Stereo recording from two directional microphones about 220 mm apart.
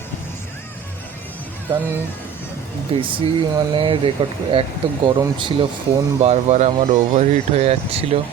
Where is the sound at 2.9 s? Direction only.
25° right (ahead or behind).